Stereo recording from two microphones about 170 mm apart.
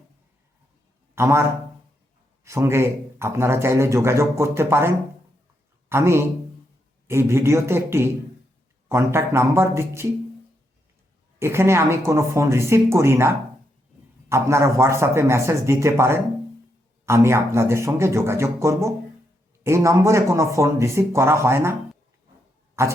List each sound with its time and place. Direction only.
1.1 s a man's voice: 15° right (ahead or behind)
5.9 s a man's voice: 15° right (ahead or behind)
11.3 s a man's voice: 15° right (ahead or behind)
22.8 s a man's voice: 15° right (ahead or behind)